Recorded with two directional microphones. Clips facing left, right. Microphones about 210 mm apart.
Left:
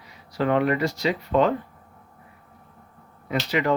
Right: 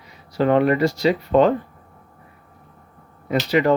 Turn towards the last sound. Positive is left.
turn(degrees=-35)  # may be behind; listen again after turning